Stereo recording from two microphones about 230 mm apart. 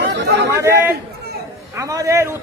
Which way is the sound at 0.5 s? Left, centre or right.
Centre.